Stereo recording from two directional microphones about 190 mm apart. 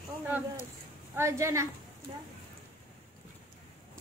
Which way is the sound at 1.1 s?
15° right (ahead or behind).